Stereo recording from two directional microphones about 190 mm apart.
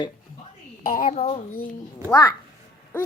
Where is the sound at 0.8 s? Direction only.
50° left (ahead or behind).